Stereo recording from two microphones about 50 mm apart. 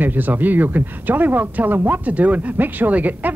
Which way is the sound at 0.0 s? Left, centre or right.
Right.